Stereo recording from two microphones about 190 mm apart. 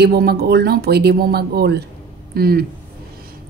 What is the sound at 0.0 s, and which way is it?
Speech, 55° right (ahead or behind).